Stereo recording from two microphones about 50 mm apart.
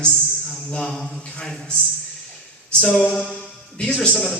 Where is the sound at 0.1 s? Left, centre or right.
Centre.